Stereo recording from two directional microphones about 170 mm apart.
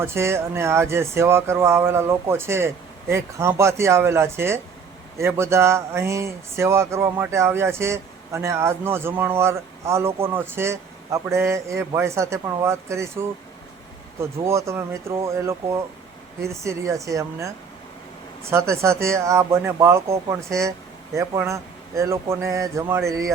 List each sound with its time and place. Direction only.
0.0 s speech: 15° right (ahead or behind)
14.4 s speech: 15° right (ahead or behind)
18.5 s speech: 15° right (ahead or behind)